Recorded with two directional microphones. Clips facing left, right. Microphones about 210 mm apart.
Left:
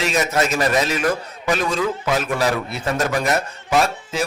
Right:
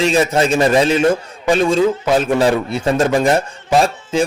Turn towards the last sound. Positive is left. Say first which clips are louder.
# right 5 dB
turn(degrees=-30)  # may be behind; listen again after turning